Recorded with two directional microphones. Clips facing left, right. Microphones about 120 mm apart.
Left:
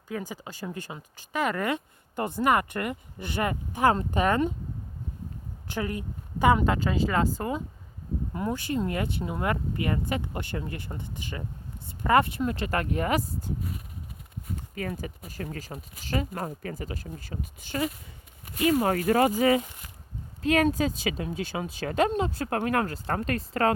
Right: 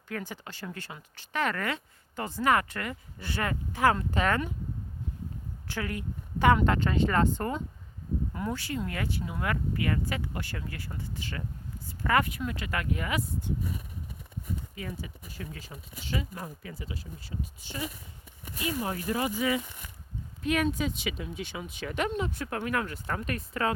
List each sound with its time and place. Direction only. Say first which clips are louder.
0.1 s speech: left 3 dB; 15° left (ahead or behind)
5.6 s speech: left 3 dB; 20° left (ahead or behind)
6.4 s speech: left 1 dB; 15° left (ahead or behind)
8.3 s speech: left 8 dB; 25° left (ahead or behind)
12.4 s speech: left 6 dB; 40° left (ahead or behind)
14.8 s speech: left 6 dB; 55° left (ahead or behind)
17.3 s speech: left 6 dB; 70° left (ahead or behind); by 19.3 s 90° left
19.3 s speech: left 6 dB; 50° left (ahead or behind)
20.7 s speech: left 4 dB; 40° left (ahead or behind)
22.4 s speech: left 6 dB; 55° left (ahead or behind)
22.9 s speech: left 5 dB; 40° left (ahead or behind)